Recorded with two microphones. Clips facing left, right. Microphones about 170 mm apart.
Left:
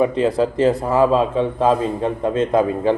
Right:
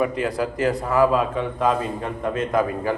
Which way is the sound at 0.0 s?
25° left (ahead or behind).